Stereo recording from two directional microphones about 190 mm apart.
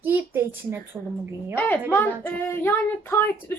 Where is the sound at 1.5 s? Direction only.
10° left (ahead or behind).